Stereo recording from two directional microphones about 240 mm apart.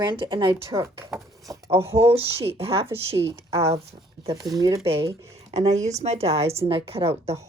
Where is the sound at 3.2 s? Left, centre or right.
Centre.